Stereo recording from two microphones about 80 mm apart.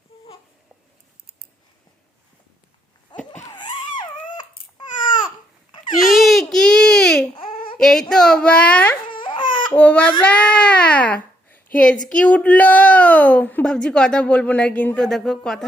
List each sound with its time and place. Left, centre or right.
3.1 s a sound: left
4.4 s baby cry: left
6.1 s baby cry: centre
8.1 s babbling: centre
9.0 s crying: left
9.7 s baby cry: centre
10.2 s a sound: centre
12.0 s speech: centre
15.0 s speech: centre